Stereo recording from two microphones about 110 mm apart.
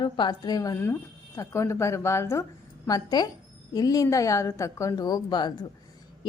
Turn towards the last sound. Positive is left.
turn(degrees=40)  # may be behind; listen again after turning